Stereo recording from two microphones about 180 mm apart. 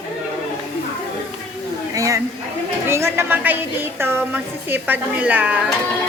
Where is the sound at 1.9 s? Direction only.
20° right (ahead or behind).